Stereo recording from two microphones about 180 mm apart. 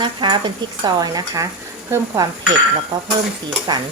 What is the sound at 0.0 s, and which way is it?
Speech, 25° right (ahead or behind).